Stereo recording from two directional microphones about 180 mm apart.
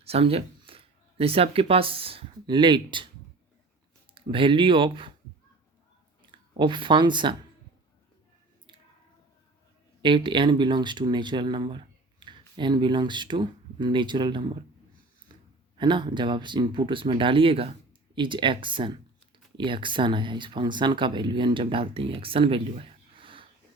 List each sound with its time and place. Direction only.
0.0 s speech: 35° right (ahead or behind)
4.1 s speech: 30° right (ahead or behind)
6.6 s speech: 25° right (ahead or behind)
10.0 s speech: 25° right (ahead or behind)
15.3 s a sound: 25° right (ahead or behind)
15.8 s speech: 25° right (ahead or behind)